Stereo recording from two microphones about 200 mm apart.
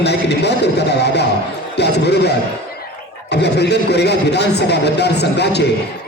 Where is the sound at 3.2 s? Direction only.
55° left (ahead or behind).